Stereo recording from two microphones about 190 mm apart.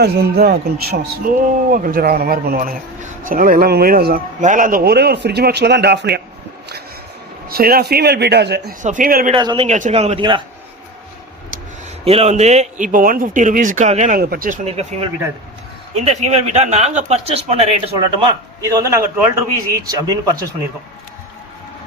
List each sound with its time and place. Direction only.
0.0 s a man's voice: 55° right (ahead or behind)
1.4 s a man's voice: 45° right (ahead or behind)
7.4 s a man's voice: 50° right (ahead or behind)
8.8 s a man's voice: 45° right (ahead or behind)
9.3 s speech: 25° right (ahead or behind)
9.6 s speech: 40° right (ahead or behind)
12.0 s a man's voice: 35° right (ahead or behind); by 14.6 s 50° right (ahead or behind)
14.6 s speech: 35° right (ahead or behind)
16.0 s speech: 35° right (ahead or behind)
17.9 s a man's voice: 20° right (ahead or behind)